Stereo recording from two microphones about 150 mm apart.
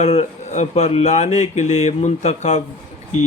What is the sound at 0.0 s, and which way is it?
A man's voice, 50° left (ahead or behind).